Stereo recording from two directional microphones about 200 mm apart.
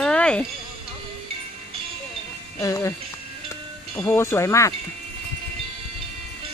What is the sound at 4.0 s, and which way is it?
Speech, 10° left (ahead or behind).